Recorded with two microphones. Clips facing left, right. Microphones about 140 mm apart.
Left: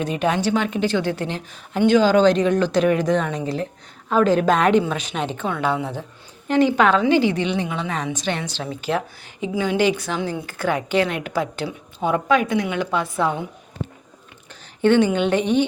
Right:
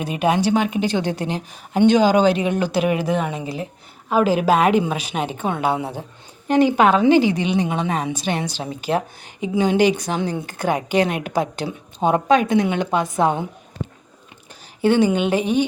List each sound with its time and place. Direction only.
0.0 s speech: 10° right (ahead or behind)
7.7 s a woman's voice: 25° right (ahead or behind)
8.1 s a woman's voice: 10° right (ahead or behind)
14.8 s speech: 10° right (ahead or behind)